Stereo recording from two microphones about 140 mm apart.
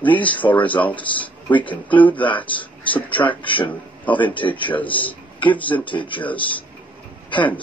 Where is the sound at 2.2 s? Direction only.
35° left (ahead or behind).